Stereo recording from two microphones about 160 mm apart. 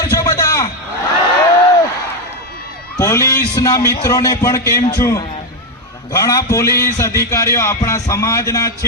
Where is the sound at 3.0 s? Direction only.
20° left (ahead or behind).